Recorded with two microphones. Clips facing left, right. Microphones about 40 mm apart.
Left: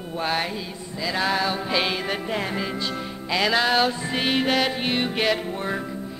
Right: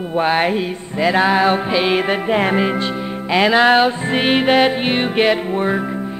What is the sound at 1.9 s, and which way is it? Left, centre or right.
Music, right.